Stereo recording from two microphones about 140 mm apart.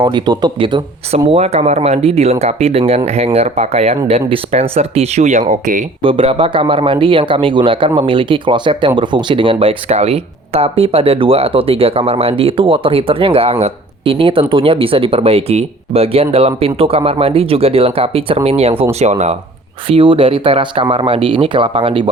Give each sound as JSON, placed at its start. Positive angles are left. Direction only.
{"t": 0.0, "sound": "a man's voice", "side_deg": -30}
{"t": 1.3, "sound": "speech", "side_deg": -50}
{"t": 6.0, "sound": "a man's voice", "side_deg": -40}
{"t": 19.9, "sound": "a man's voice", "side_deg": -40}